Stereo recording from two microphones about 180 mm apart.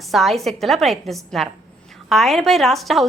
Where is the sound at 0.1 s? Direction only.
Centre (ahead or behind).